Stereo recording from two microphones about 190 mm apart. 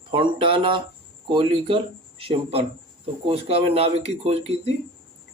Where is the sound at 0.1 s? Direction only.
25° right (ahead or behind).